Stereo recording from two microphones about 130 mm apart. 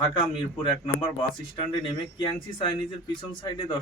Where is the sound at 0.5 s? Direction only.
40° left (ahead or behind).